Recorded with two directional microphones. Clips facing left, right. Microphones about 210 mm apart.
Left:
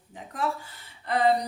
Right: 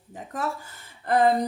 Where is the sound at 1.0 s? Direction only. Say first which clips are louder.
Right 4 dB; 50° right (ahead or behind).